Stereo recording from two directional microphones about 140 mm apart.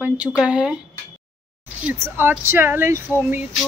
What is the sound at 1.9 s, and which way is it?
Speech, 15° right (ahead or behind).